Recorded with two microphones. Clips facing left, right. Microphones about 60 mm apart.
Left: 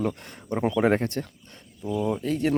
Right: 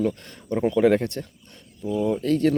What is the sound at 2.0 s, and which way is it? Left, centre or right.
Speech, centre.